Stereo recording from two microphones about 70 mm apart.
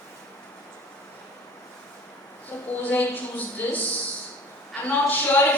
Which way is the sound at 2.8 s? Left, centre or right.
Left.